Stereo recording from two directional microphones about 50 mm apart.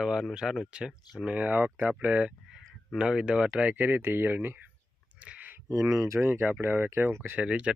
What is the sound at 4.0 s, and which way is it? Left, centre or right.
Speech, right.